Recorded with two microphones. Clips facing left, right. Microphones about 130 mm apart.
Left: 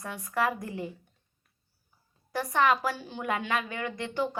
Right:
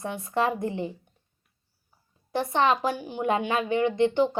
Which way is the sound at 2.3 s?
25° right (ahead or behind).